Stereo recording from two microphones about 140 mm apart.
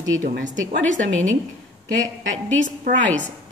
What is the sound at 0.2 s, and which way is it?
Speech, 65° right (ahead or behind).